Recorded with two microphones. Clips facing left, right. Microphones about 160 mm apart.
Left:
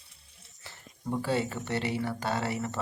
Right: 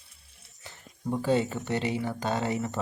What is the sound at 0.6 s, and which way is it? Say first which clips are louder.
Speech: right 3 dB; 20° right (ahead or behind).